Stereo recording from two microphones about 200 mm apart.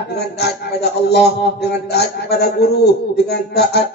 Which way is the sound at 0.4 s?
55° left (ahead or behind).